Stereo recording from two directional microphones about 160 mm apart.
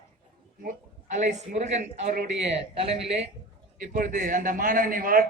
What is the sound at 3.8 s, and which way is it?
A man's voice, 55° right (ahead or behind).